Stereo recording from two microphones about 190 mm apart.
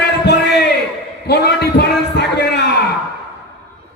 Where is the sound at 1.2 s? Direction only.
60° left (ahead or behind).